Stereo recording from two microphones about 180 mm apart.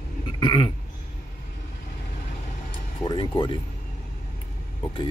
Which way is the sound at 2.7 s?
25° left (ahead or behind).